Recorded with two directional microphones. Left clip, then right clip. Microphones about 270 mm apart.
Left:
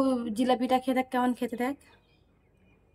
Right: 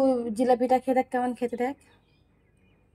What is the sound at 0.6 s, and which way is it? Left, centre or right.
Speech, left.